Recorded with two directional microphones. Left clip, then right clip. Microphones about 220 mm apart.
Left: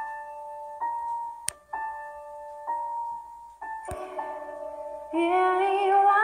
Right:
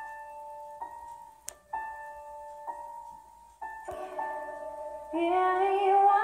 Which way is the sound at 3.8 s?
50° left (ahead or behind).